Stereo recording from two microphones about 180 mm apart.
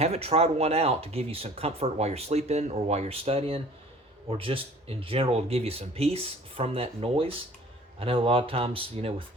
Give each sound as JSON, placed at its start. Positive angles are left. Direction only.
{"t": 0.0, "sound": "speech", "side_deg": -35}